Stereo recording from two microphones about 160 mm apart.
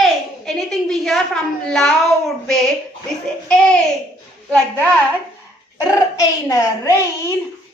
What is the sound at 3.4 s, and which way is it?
Speech, 5° left (ahead or behind).